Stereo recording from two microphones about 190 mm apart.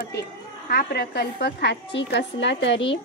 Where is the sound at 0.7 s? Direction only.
55° left (ahead or behind).